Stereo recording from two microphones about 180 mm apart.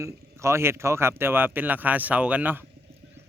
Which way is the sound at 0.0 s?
15° right (ahead or behind).